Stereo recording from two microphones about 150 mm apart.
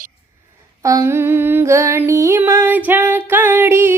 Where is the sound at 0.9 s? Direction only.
20° right (ahead or behind).